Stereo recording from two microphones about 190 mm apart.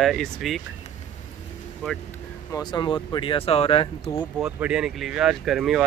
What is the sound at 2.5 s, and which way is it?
Speech, 20° left (ahead or behind).